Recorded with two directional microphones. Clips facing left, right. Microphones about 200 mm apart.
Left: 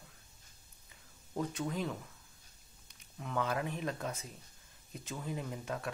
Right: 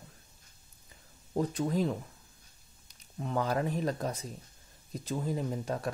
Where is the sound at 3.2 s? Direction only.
35° right (ahead or behind).